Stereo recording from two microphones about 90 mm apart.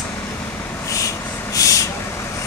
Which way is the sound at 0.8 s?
35° left (ahead or behind).